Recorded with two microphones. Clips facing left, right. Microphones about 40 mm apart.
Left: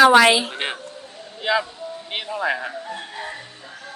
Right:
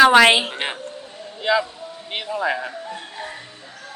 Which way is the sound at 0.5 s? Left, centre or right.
Centre.